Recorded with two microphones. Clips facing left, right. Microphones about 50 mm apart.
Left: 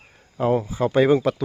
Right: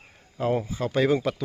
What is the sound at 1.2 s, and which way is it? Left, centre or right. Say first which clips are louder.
Speech: left 5 dB; centre.